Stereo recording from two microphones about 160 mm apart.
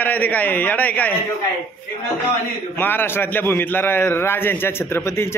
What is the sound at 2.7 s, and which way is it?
A man's voice, 15° left (ahead or behind).